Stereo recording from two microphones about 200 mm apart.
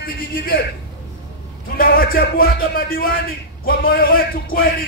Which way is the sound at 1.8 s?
45° left (ahead or behind).